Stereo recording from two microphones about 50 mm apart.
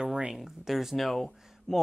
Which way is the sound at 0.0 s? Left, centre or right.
Centre.